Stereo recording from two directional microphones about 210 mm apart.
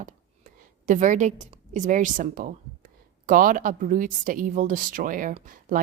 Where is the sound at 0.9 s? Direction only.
35° right (ahead or behind).